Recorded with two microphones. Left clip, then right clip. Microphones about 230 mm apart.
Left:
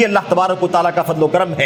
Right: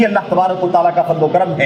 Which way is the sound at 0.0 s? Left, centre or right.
Left.